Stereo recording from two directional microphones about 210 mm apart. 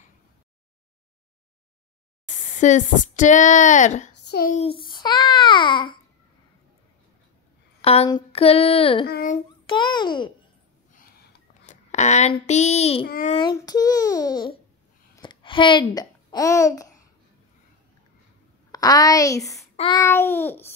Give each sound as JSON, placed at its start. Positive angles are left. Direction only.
{"t": 2.6, "sound": "a woman's voice", "side_deg": 35}
{"t": 4.2, "sound": "a child's voice", "side_deg": 50}
{"t": 4.6, "sound": "child singing", "side_deg": 25}
{"t": 7.8, "sound": "child singing", "side_deg": 30}
{"t": 9.0, "sound": "a sound", "side_deg": 45}
{"t": 9.7, "sound": "child singing", "side_deg": 20}
{"t": 11.6, "sound": "a child's voice", "side_deg": 35}
{"t": 13.0, "sound": "a sound", "side_deg": 45}
{"t": 13.3, "sound": "child singing", "side_deg": 20}
{"t": 15.1, "sound": "a child's voice", "side_deg": 25}
{"t": 18.7, "sound": "a woman's voice", "side_deg": 15}
{"t": 19.8, "sound": "babbling", "side_deg": 15}